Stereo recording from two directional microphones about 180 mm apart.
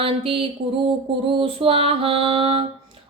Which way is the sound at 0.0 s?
30° right (ahead or behind).